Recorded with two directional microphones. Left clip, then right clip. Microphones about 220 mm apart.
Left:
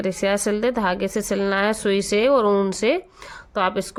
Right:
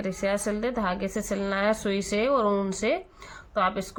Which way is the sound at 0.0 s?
50° left (ahead or behind).